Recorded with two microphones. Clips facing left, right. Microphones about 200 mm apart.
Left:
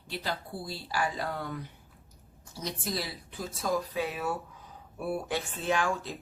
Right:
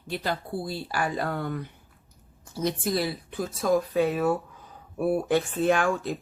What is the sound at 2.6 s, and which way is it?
Speech, 55° right (ahead or behind).